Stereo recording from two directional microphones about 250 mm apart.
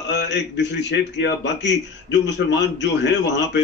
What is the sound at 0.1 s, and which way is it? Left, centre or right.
A man's voice, left.